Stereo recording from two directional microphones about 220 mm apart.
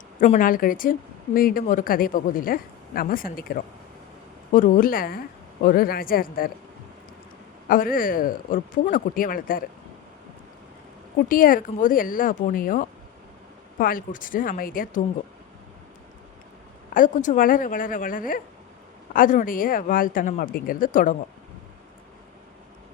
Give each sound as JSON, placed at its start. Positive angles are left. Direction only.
{"t": 0.2, "sound": "a woman's voice", "side_deg": 35}
{"t": 7.7, "sound": "a woman's voice", "side_deg": 40}
{"t": 11.3, "sound": "a woman's voice", "side_deg": 40}
{"t": 16.9, "sound": "a woman's voice", "side_deg": 35}